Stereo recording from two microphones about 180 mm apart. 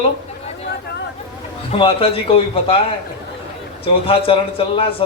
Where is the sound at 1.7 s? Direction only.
30° left (ahead or behind).